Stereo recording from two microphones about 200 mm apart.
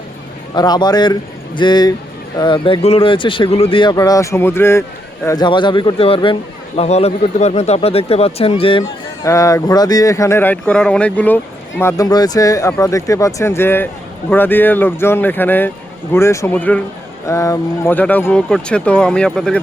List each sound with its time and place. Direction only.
0.5 s speech: 20° left (ahead or behind)
9.2 s speech: 15° left (ahead or behind)